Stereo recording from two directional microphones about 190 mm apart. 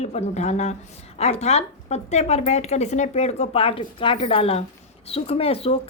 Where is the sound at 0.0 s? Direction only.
35° left (ahead or behind).